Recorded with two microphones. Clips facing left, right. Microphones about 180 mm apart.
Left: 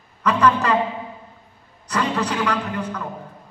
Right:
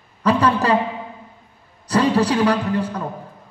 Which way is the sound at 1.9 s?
35° right (ahead or behind).